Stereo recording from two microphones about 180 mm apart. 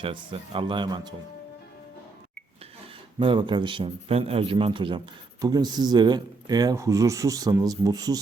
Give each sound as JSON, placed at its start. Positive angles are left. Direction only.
{"t": 0.0, "sound": "a man's voice", "side_deg": -30}
{"t": 3.2, "sound": "a man's voice", "side_deg": -25}